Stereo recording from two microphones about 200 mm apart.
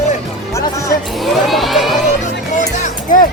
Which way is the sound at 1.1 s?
Centre (ahead or behind).